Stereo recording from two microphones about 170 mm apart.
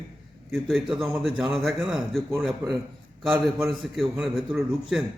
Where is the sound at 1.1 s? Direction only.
Centre (ahead or behind).